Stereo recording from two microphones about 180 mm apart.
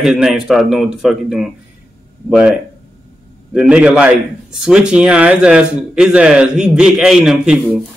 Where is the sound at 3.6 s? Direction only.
5° right (ahead or behind).